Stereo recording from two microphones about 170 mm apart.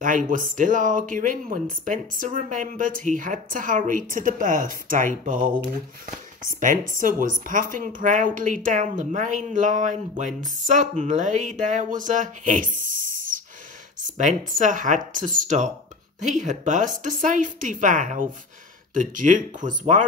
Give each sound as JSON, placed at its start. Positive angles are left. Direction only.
{"t": 0.0, "sound": "speech", "side_deg": -50}
{"t": 6.6, "sound": "speech", "side_deg": -50}